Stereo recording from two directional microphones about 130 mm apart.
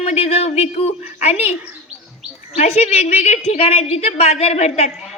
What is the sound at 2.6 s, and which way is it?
A woman's voice, 55° left (ahead or behind).